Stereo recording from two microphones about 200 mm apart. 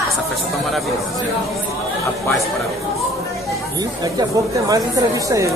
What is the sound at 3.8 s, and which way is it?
Speech, 20° right (ahead or behind).